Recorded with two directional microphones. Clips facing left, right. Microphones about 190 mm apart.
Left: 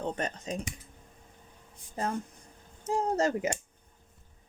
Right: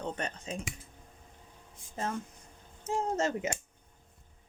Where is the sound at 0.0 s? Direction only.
40° left (ahead or behind).